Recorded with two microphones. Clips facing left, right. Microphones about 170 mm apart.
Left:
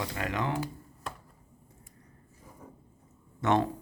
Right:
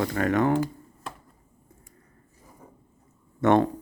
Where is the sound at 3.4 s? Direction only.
55° right (ahead or behind).